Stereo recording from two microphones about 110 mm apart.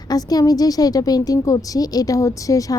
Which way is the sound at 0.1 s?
35° left (ahead or behind).